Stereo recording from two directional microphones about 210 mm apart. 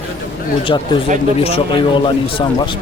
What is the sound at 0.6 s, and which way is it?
A man's voice, 20° left (ahead or behind).